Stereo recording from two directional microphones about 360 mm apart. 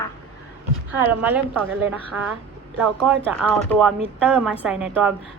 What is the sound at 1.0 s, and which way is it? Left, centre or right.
Speech, centre.